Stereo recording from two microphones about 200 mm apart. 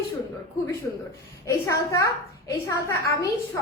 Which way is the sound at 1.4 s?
15° left (ahead or behind).